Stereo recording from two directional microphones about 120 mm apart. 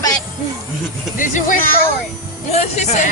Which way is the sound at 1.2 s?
90° left.